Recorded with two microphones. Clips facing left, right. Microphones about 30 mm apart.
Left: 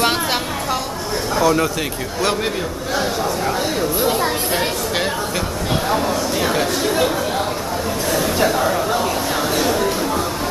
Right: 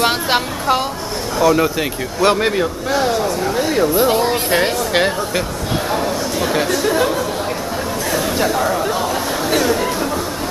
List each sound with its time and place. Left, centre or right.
1.4 s speech: centre
3.7 s speech: centre
5.9 s speech: centre
8.1 s a sound: centre
8.5 s speech: centre